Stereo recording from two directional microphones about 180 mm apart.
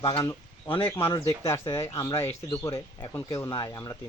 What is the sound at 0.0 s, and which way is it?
Speech, 30° left (ahead or behind).